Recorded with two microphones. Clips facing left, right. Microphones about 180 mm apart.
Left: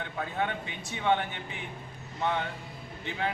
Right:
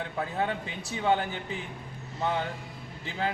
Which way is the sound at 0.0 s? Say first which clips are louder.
Right 2 dB; 35° right (ahead or behind).